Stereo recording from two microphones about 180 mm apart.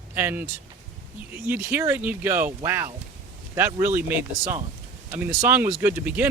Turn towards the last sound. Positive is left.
turn(degrees=-10)  # may be behind; listen again after turning